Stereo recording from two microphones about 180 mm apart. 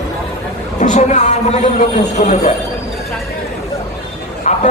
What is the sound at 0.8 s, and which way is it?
A man's voice, 40° left (ahead or behind).